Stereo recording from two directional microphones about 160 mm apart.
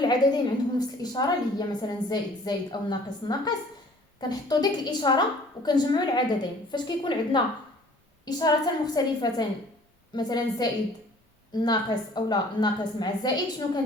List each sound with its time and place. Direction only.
0.0 s a woman's voice: 25° left (ahead or behind)